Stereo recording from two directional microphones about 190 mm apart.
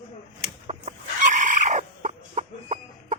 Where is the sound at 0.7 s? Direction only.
40° right (ahead or behind).